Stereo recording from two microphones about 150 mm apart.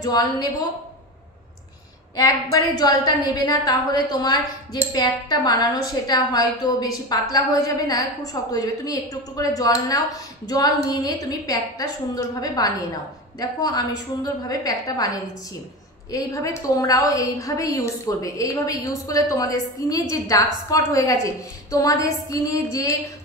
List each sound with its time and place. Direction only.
0.0 s a woman's voice: 25° left (ahead or behind)
2.1 s a woman's voice: 25° left (ahead or behind)